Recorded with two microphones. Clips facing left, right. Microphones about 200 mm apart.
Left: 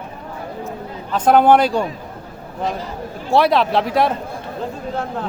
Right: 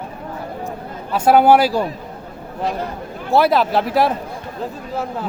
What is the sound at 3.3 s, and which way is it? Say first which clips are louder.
A man's voice: even; centre (ahead or behind).